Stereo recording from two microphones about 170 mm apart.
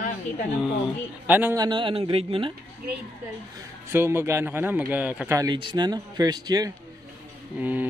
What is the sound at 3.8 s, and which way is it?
Speech, 15° right (ahead or behind).